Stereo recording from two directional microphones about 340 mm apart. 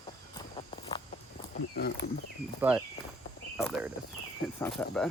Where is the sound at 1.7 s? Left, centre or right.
Left.